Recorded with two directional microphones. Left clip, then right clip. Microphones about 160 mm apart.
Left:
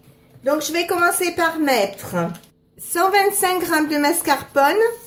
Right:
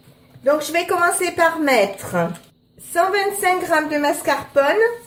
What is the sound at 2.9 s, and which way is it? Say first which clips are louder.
A woman's voice: left 2 dB; 35° left (ahead or behind).